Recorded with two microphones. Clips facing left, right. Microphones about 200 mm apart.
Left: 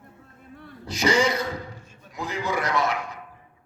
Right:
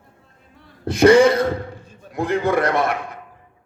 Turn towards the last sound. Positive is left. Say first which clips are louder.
# right 5 dB
turn(degrees=-55)  # may be behind; listen again after turning